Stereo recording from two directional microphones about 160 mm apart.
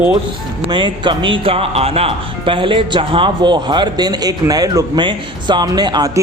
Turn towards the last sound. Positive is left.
turn(degrees=-25)  # may be behind; listen again after turning